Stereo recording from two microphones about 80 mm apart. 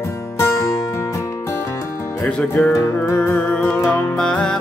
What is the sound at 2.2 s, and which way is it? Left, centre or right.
Music, centre.